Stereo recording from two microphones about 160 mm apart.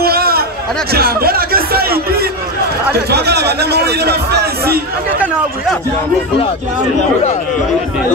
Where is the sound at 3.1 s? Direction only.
90° right.